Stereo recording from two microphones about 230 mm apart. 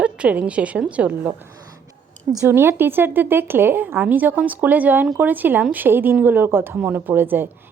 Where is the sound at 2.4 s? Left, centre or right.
Centre.